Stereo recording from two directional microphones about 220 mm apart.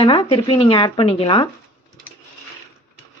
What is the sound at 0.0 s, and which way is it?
A woman's voice, 25° left (ahead or behind).